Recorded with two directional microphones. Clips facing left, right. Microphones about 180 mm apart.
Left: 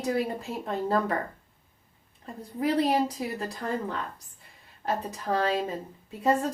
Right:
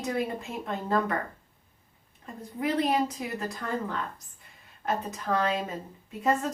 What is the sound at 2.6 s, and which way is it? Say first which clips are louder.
Speech: left 2 dB; 35° left (ahead or behind).